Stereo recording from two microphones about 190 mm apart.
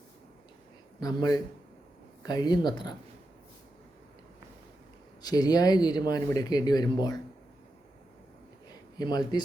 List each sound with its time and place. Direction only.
0.9 s speech: 20° left (ahead or behind)
5.2 s speech: 20° left (ahead or behind)
9.0 s speech: 20° left (ahead or behind)